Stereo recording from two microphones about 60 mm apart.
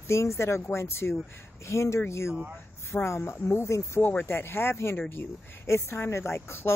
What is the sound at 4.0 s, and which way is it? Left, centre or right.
Speech, left.